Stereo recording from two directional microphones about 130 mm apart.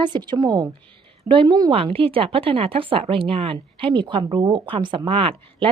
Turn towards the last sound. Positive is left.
turn(degrees=-45)  # may be behind; listen again after turning